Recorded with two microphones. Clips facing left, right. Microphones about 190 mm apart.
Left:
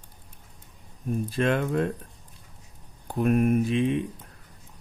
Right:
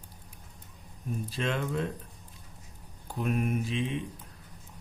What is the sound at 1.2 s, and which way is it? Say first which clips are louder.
Speech: left 7 dB; 55° left (ahead or behind).